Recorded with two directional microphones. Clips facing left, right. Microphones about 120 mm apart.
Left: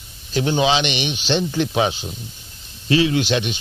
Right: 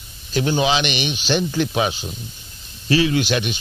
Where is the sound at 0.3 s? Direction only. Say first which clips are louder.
Left 1 dB; 25° left (ahead or behind).